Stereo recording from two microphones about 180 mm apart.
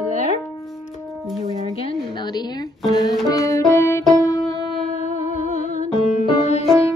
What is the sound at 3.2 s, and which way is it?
Music, 20° left (ahead or behind).